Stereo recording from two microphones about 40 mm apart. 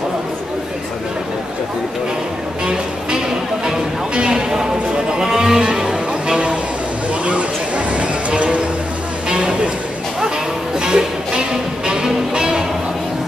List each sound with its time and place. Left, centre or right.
3.6 s sheep: right
7.2 s a sound: right
10.8 s music: centre